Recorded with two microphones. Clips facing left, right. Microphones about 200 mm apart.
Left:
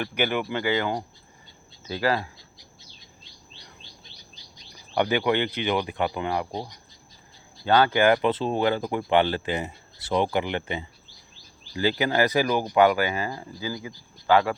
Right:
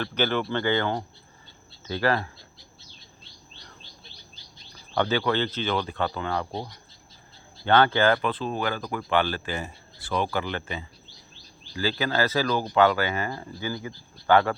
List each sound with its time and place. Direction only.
0.0 s speech: 10° left (ahead or behind)
4.5 s speech: 15° left (ahead or behind)